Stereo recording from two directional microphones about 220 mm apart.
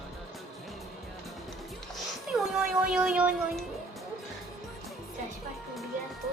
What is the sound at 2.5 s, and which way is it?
Music, 5° right (ahead or behind).